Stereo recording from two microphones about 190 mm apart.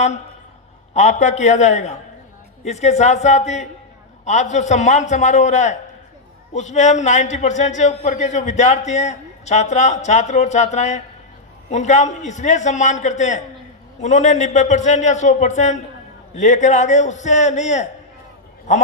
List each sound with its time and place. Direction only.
0.9 s a man's voice: 40° left (ahead or behind)